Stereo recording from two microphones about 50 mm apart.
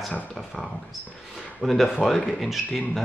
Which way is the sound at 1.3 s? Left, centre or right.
Centre.